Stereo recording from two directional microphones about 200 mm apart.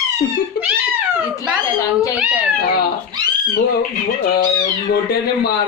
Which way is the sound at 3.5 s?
45° left (ahead or behind).